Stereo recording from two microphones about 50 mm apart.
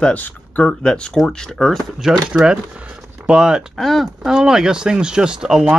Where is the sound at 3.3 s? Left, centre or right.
Right.